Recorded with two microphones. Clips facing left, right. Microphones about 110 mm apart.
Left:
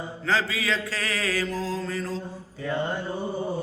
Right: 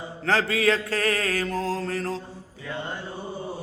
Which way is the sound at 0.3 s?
60° right (ahead or behind).